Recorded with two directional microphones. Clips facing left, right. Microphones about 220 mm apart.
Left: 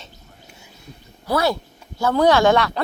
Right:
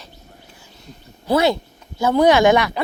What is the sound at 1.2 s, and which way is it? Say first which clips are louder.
Speech: right 4 dB; 25° right (ahead or behind).